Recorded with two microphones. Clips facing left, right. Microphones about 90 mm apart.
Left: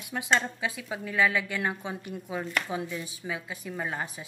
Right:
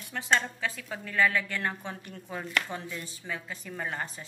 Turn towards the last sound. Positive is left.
turn(degrees=10)  # may be behind; listen again after turning